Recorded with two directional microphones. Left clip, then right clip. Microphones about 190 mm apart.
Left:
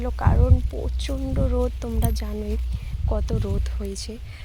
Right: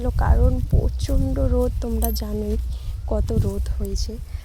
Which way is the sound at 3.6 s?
15° right (ahead or behind).